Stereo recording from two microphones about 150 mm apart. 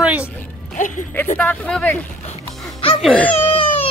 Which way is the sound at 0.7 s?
55° left (ahead or behind).